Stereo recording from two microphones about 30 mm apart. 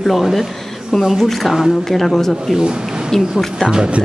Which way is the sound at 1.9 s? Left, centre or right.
Centre.